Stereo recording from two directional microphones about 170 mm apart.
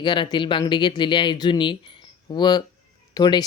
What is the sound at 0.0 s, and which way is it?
Speech, 25° left (ahead or behind).